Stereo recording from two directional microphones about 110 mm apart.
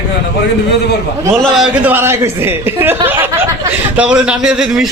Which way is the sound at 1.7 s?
15° right (ahead or behind).